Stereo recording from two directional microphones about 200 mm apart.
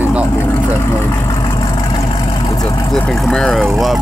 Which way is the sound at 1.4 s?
20° left (ahead or behind).